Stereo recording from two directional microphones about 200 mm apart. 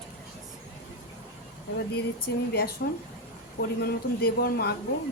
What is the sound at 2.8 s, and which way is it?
Speech, 55° left (ahead or behind).